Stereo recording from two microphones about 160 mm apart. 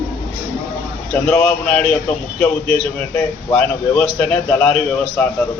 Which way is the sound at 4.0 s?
5° left (ahead or behind).